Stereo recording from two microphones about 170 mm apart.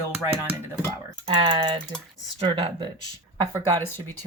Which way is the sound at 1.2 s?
30° right (ahead or behind).